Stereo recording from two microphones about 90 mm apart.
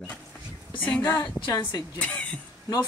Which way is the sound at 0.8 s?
15° left (ahead or behind).